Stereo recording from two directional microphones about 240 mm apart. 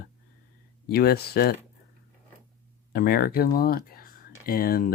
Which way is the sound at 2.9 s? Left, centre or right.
Left.